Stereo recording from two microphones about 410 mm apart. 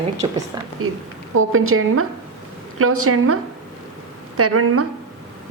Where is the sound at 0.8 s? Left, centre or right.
Right.